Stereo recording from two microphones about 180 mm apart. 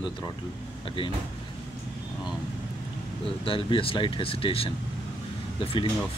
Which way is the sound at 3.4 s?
30° left (ahead or behind).